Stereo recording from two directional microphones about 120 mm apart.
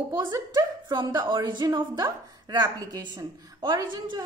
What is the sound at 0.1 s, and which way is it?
A woman's voice, 35° right (ahead or behind).